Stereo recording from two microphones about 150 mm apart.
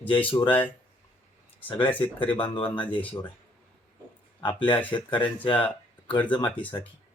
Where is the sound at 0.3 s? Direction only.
35° left (ahead or behind).